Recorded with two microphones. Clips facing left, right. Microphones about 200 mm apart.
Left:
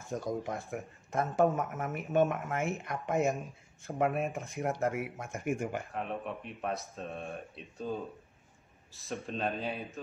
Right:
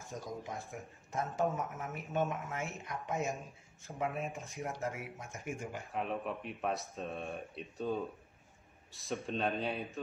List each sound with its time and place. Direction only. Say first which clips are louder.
0.2 s speech: left 5 dB; 55° left (ahead or behind)
5.9 s speech: even; centre (ahead or behind)